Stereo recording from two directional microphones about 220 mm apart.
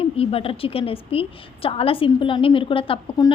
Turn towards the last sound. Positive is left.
turn(degrees=20)  # may be behind; listen again after turning